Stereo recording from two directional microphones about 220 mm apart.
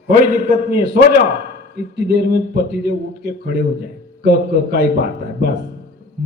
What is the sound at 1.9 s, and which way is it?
A man's voice, 45° right (ahead or behind).